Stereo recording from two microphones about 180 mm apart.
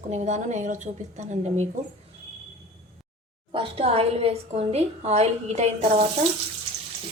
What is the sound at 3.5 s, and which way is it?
A woman's voice, 30° right (ahead or behind).